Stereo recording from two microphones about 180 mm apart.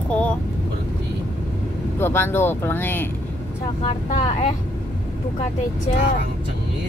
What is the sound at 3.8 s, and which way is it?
Speech, 35° left (ahead or behind).